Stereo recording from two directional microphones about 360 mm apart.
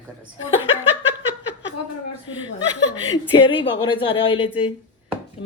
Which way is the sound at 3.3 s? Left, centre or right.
Centre.